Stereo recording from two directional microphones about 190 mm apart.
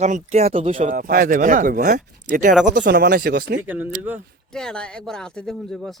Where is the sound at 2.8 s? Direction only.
60° right (ahead or behind).